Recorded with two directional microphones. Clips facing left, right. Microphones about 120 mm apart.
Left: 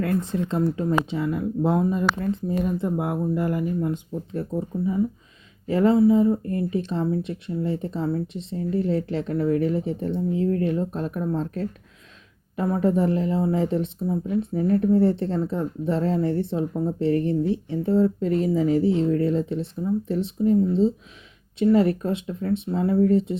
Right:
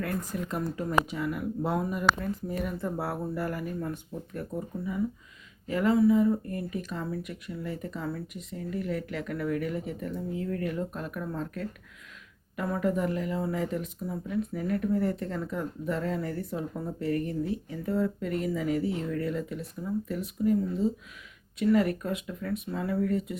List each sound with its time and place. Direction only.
0.0 s speech: 25° left (ahead or behind)
4.4 s speech: 30° left (ahead or behind)